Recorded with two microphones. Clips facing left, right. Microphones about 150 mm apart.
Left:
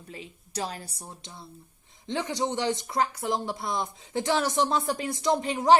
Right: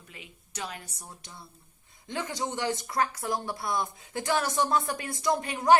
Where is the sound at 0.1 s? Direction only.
35° left (ahead or behind).